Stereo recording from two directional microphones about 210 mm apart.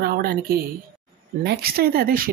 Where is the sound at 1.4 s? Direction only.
50° right (ahead or behind).